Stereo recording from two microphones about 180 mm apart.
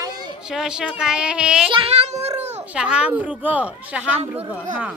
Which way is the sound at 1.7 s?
30° right (ahead or behind).